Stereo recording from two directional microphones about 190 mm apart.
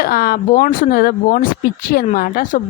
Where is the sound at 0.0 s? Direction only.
50° left (ahead or behind).